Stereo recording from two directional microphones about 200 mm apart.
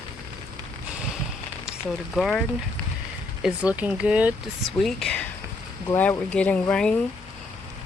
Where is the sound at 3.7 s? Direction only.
5° right (ahead or behind).